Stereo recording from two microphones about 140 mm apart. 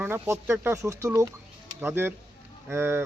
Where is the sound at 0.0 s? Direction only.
15° right (ahead or behind).